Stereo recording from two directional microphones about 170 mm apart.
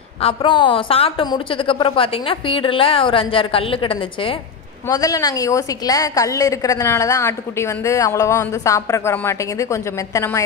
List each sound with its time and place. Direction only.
0.2 s a woman's voice: 30° left (ahead or behind)
4.8 s a woman's voice: 20° left (ahead or behind)